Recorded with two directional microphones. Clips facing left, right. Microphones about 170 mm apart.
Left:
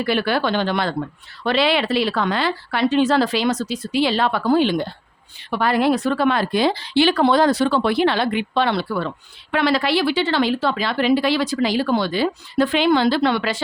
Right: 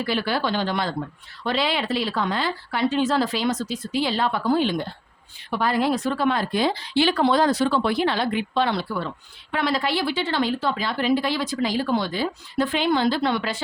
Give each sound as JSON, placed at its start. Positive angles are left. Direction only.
{"t": 0.0, "sound": "speech", "side_deg": 65}
{"t": 5.4, "sound": "a woman's voice", "side_deg": 70}